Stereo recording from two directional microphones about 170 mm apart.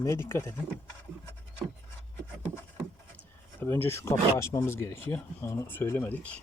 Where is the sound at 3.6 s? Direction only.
15° left (ahead or behind).